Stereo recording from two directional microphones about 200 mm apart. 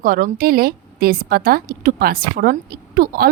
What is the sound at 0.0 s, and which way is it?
A woman's voice, 45° right (ahead or behind).